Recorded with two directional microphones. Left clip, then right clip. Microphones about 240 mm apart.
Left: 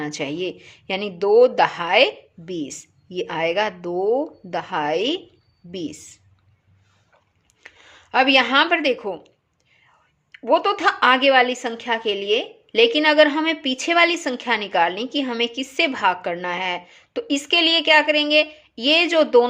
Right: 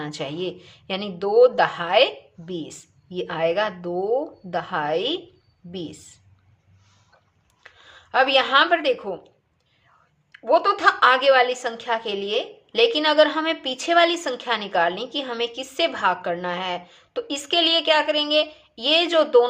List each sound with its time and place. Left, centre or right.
0.0 s a woman's voice: left
7.6 s a woman's voice: left
10.3 s a woman's voice: left